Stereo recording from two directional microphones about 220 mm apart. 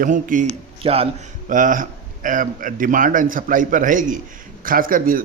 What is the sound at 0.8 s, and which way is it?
Speech, 25° right (ahead or behind).